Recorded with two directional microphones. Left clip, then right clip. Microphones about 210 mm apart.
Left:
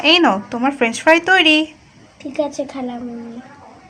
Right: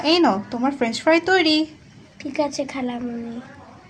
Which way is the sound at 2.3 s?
25° right (ahead or behind).